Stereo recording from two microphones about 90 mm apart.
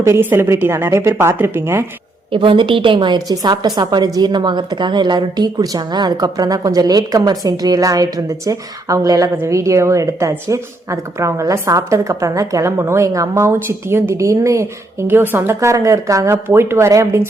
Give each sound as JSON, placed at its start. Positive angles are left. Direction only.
{"t": 0.0, "sound": "speech", "side_deg": -25}
{"t": 2.3, "sound": "a woman's voice", "side_deg": -75}
{"t": 3.8, "sound": "a woman's voice", "side_deg": -45}